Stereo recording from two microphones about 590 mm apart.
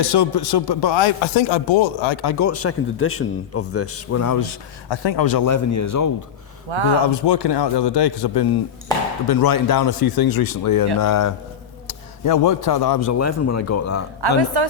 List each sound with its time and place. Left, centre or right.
0.0 s speech: left
2.4 s a man's voice: left
6.7 s speech: right
7.0 s speech: left
11.9 s a sound: left
12.6 s a man's voice: left